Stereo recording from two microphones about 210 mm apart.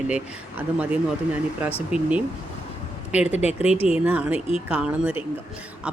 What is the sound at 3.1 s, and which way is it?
Speech, 5° right (ahead or behind).